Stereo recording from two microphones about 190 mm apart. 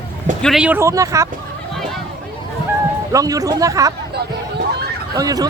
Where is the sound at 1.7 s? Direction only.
Centre (ahead or behind).